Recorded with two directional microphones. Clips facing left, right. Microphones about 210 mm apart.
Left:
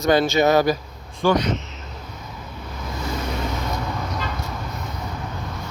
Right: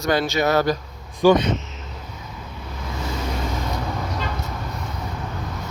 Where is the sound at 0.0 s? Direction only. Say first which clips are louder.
Left 3 dB; 20° left (ahead or behind).